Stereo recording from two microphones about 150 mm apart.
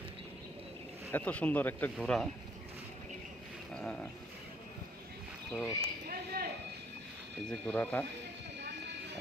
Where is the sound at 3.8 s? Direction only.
10° left (ahead or behind).